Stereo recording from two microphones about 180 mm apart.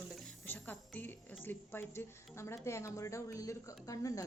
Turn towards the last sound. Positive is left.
turn(degrees=20)  # may be behind; listen again after turning